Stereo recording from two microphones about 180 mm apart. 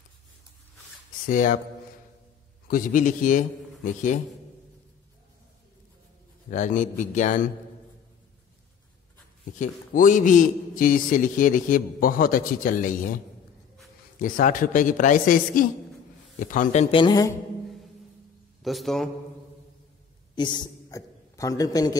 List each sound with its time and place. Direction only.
1.2 s speech: 45° left (ahead or behind)
2.7 s a man's voice: 50° left (ahead or behind)
6.5 s a man's voice: 45° left (ahead or behind)
9.6 s a man's voice: 45° left (ahead or behind)
14.2 s a man's voice: 50° left (ahead or behind)
16.9 s a woman's voice: 25° left (ahead or behind)
18.6 s a man's voice: centre (ahead or behind)
20.3 s a man's voice: 25° left (ahead or behind)